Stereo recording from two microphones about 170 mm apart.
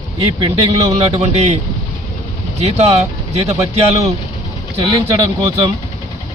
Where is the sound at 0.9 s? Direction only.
40° right (ahead or behind).